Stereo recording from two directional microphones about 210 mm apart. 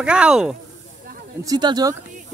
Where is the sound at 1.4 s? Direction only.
20° right (ahead or behind).